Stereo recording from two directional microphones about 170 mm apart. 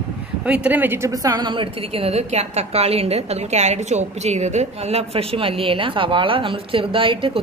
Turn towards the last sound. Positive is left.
turn(degrees=-30)  # may be behind; listen again after turning